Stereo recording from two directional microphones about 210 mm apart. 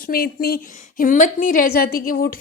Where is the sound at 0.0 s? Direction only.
45° left (ahead or behind).